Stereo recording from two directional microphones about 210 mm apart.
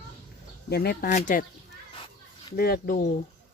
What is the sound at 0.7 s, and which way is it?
Speech, 45° left (ahead or behind).